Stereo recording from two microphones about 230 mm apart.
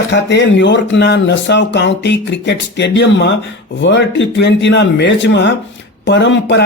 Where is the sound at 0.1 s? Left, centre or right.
Left.